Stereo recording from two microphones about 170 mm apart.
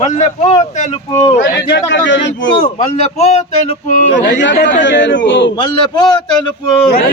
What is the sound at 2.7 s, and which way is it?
Speech, 40° left (ahead or behind).